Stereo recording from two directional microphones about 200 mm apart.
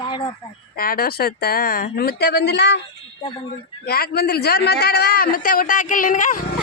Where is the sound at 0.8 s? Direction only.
50° left (ahead or behind).